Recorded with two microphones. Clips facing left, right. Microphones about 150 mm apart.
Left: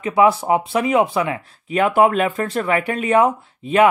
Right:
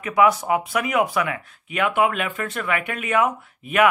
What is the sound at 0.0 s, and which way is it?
Speech, 30° left (ahead or behind).